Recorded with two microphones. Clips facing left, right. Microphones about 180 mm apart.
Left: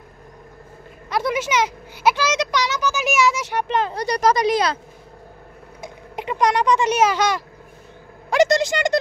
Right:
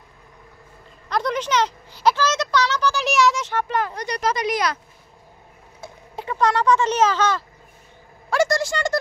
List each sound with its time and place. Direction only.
1.1 s speech: 5° left (ahead or behind)
3.9 s speech: 35° left (ahead or behind)
5.8 s speech: 15° left (ahead or behind)